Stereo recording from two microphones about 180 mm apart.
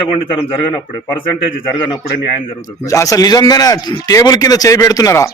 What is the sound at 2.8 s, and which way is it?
Speech, 20° left (ahead or behind).